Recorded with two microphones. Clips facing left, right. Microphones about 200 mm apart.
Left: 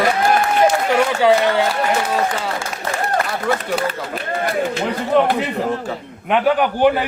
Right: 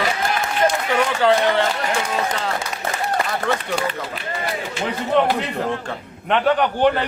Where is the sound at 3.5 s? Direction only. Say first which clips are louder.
Left 3 dB; 10° left (ahead or behind).